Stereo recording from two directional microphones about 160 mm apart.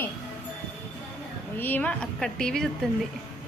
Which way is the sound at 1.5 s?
10° left (ahead or behind).